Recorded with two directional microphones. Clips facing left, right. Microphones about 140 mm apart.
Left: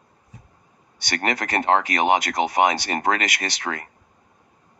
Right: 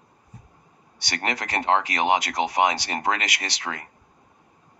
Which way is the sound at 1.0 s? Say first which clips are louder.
Left 4 dB; 50° left (ahead or behind).